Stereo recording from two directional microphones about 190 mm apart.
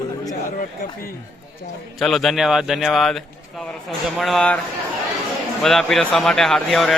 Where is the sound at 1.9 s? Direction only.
Centre (ahead or behind).